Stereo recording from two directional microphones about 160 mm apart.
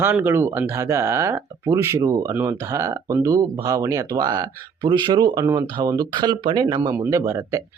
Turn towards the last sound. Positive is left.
turn(degrees=-20)  # may be behind; listen again after turning